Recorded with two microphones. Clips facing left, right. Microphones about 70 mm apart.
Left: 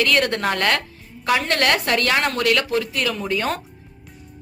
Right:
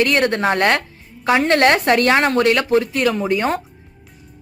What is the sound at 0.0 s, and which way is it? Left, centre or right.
A woman's voice, right.